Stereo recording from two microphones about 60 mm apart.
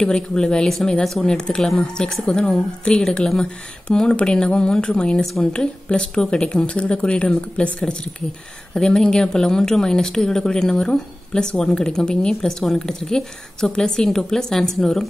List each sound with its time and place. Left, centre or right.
0.0 s speech: centre